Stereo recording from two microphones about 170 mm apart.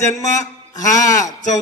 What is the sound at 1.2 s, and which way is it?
Speech, 45° left (ahead or behind).